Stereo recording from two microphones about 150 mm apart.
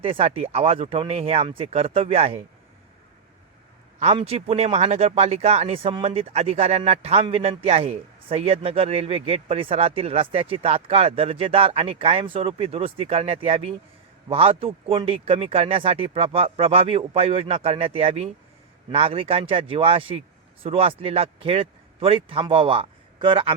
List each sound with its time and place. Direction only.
0.0 s speech: 40° right (ahead or behind)
4.0 s speech: 40° right (ahead or behind)